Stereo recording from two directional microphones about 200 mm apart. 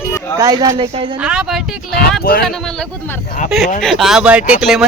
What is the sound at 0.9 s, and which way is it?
Speech, 30° right (ahead or behind).